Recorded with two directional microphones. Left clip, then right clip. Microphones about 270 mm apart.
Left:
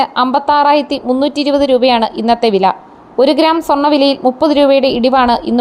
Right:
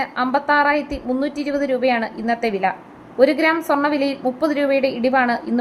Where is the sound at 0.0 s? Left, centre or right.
Centre.